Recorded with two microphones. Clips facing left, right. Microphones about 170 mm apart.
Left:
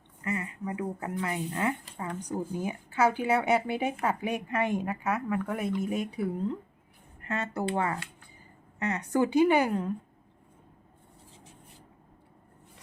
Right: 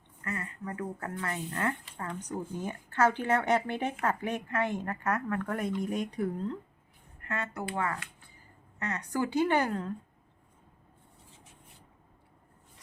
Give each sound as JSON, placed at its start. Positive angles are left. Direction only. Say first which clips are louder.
{"t": 0.3, "sound": "speech", "louder": "left 4 dB", "side_deg": 15}
{"t": 7.2, "sound": "speech", "louder": "left 4 dB", "side_deg": 25}